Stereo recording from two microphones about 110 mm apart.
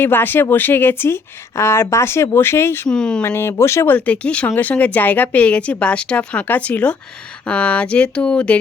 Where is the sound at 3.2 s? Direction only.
25° left (ahead or behind).